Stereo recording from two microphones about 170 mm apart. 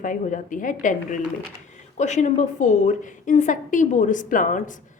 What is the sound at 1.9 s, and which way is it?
A woman's voice, 45° left (ahead or behind).